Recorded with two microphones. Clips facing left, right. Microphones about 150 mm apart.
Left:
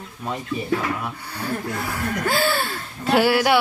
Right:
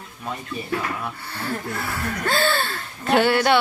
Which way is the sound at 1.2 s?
15° left (ahead or behind).